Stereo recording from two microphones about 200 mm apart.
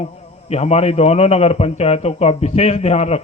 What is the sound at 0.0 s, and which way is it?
A man's voice, 30° left (ahead or behind).